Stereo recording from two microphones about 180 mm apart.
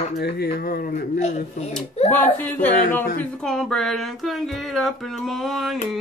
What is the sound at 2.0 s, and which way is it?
Speech, 10° left (ahead or behind).